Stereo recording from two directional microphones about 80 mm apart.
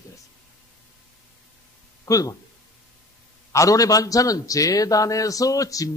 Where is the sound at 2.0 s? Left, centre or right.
Left.